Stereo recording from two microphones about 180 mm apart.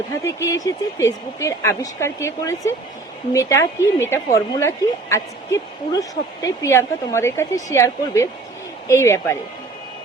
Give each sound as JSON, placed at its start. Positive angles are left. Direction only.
{"t": 0.3, "sound": "a woman's voice", "side_deg": 15}